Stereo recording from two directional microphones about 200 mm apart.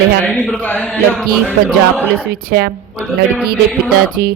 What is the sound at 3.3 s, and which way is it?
Music, 5° right (ahead or behind).